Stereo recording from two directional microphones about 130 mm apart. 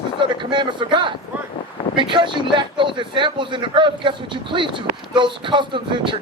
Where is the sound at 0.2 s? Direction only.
35° right (ahead or behind).